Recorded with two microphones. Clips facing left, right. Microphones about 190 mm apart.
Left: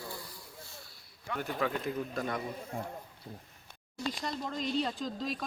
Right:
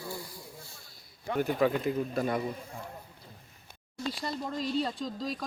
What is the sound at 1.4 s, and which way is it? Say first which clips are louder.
A man's voice: right 7 dB; 15° right (ahead or behind).